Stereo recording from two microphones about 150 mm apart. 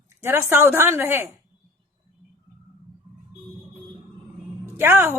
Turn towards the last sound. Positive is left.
turn(degrees=-15)  # may be behind; listen again after turning